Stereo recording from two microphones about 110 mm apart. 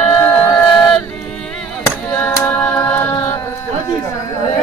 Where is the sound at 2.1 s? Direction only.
20° left (ahead or behind).